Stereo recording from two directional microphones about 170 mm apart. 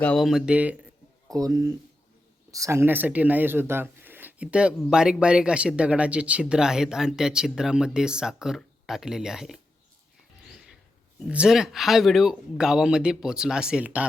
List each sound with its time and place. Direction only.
0.0 s speech: 5° left (ahead or behind)
1.3 s speech: 20° right (ahead or behind); by 9.6 s centre (ahead or behind)
10.5 s a sound: 5° right (ahead or behind)
11.2 s speech: 5° right (ahead or behind)